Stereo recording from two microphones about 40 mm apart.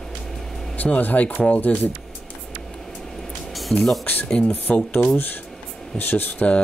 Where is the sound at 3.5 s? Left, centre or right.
Centre.